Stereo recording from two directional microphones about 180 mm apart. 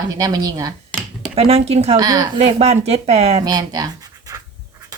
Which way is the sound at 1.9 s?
20° right (ahead or behind).